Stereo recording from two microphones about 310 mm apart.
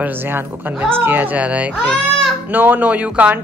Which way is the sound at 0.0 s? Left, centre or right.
Centre.